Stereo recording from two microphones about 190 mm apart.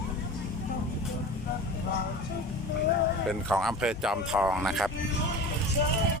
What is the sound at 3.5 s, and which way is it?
Speech, centre (ahead or behind).